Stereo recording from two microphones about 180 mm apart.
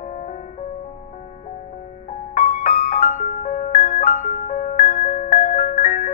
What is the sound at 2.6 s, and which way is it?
Music, 50° left (ahead or behind).